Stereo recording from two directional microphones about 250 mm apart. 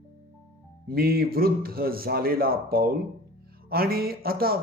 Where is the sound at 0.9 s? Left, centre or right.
Right.